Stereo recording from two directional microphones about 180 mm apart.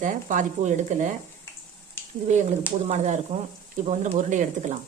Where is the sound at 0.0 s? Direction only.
45° right (ahead or behind).